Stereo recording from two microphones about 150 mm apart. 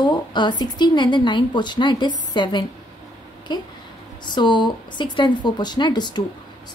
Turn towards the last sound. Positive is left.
turn(degrees=30)  # may be behind; listen again after turning